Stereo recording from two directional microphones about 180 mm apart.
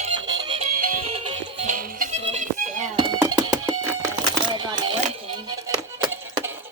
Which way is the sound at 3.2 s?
20° right (ahead or behind).